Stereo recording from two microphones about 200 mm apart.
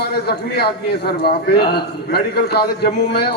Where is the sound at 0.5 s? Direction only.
50° left (ahead or behind).